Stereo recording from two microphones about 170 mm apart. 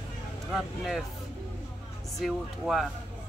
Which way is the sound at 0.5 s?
Centre (ahead or behind).